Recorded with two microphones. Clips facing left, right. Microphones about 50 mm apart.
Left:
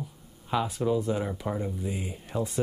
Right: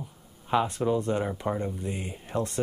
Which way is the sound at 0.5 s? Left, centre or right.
Centre.